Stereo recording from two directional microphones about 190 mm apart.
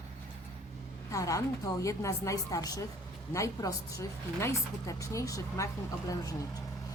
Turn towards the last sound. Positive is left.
turn(degrees=15)  # may be behind; listen again after turning